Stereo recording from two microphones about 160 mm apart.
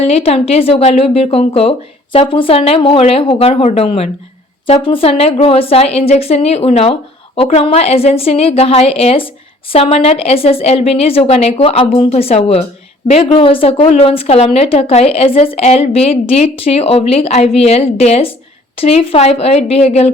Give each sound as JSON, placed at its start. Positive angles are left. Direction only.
{"t": 0.0, "sound": "a woman's voice", "side_deg": 40}